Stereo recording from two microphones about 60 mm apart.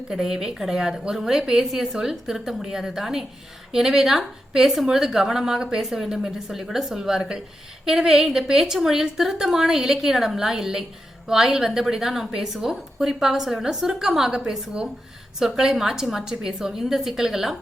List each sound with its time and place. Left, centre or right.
0.1 s a woman's voice: centre